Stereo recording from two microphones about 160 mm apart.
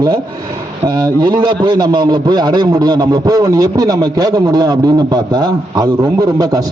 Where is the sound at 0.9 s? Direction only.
25° right (ahead or behind).